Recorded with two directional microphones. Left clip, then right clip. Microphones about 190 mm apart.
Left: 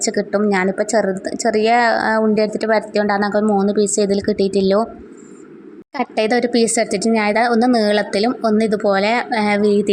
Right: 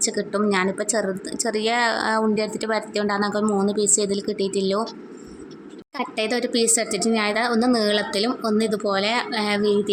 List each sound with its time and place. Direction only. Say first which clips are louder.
0.0 s a woman's voice: left 5 dB; 30° left (ahead or behind)
6.0 s a woman's voice: left 7 dB; 30° left (ahead or behind)